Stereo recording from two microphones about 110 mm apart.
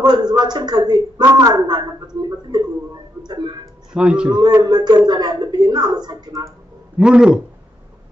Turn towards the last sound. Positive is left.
turn(degrees=-10)  # may be behind; listen again after turning